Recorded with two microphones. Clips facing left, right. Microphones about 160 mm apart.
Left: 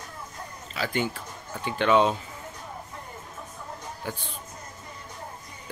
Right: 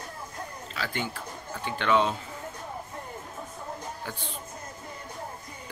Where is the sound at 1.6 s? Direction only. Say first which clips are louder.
Left 4 dB; 15° left (ahead or behind).